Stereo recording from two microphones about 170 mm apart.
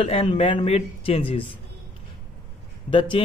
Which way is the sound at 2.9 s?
30° left (ahead or behind).